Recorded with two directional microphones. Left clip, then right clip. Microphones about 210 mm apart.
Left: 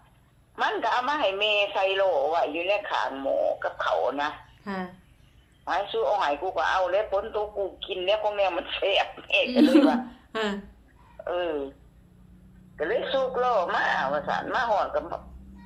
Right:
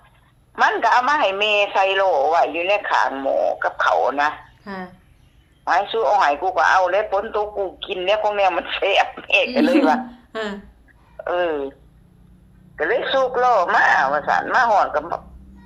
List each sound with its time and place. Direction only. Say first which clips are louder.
0.5 s a man's voice: right 9 dB; 50° right (ahead or behind)
4.6 s speech: right 1 dB; centre (ahead or behind)
5.6 s a man's voice: right 8 dB; 50° right (ahead or behind)
9.5 s a woman's voice: right 4 dB; centre (ahead or behind)
11.2 s a man's voice: right 7 dB; 50° right (ahead or behind)
12.7 s a man's voice: right 7 dB; 50° right (ahead or behind)